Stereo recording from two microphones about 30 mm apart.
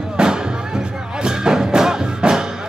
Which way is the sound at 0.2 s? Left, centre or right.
Right.